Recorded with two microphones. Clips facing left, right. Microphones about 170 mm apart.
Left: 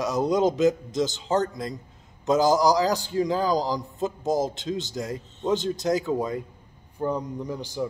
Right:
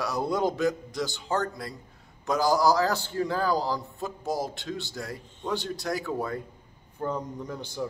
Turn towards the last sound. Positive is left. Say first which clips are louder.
# left 4 dB
turn(degrees=10)  # may be behind; listen again after turning